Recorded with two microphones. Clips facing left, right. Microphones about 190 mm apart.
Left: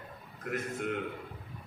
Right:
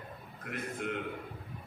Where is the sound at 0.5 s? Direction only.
50° left (ahead or behind).